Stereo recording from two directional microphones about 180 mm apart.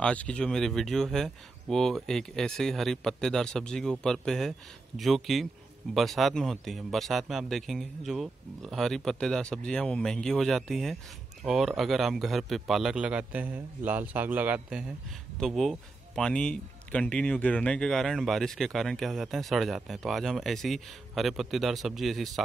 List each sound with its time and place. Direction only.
0.0 s a man's voice: 5° left (ahead or behind)